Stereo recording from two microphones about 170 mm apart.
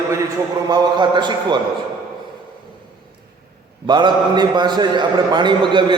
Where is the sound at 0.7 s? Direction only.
25° right (ahead or behind).